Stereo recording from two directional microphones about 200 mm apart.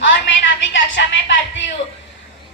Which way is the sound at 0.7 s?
65° left (ahead or behind).